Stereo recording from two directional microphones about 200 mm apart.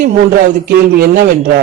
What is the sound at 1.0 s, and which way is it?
Speech, 45° right (ahead or behind).